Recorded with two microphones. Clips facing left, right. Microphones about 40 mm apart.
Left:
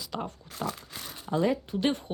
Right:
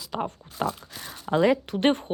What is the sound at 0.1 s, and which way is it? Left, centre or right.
Speech, centre.